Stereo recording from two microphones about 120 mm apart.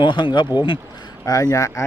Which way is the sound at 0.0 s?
40° left (ahead or behind).